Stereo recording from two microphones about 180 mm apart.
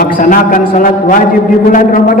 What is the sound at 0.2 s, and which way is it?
A man's voice, 50° left (ahead or behind).